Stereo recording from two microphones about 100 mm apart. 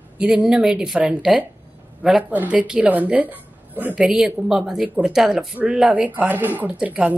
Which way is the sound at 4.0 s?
5° right (ahead or behind).